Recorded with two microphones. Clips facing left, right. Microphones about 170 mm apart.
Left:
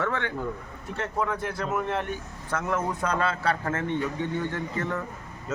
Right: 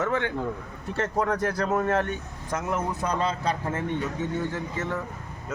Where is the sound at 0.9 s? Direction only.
40° right (ahead or behind).